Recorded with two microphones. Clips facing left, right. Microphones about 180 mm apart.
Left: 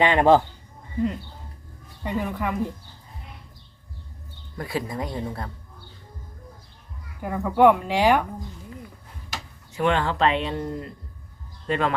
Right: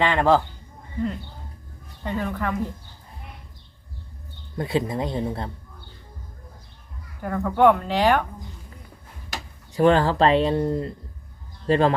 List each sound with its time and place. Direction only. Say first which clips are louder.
0.0 s speech: left 2 dB; 15° left (ahead or behind)
2.0 s speech: even; 10° left (ahead or behind)
4.5 s speech: right 5 dB; 25° right (ahead or behind)
7.2 s speech: left 1 dB; 10° left (ahead or behind)
9.7 s speech: right 5 dB; 35° right (ahead or behind)